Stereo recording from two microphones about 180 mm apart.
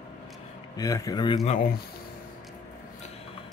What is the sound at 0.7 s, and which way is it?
Speech, 20° left (ahead or behind).